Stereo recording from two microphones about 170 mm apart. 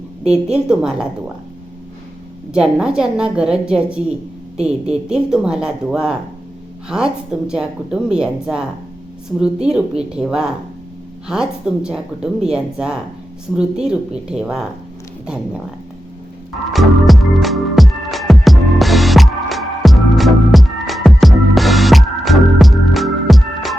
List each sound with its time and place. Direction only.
0.3 s a woman's voice: 5° right (ahead or behind)
2.5 s a woman's voice: 5° right (ahead or behind)
16.7 s music: centre (ahead or behind)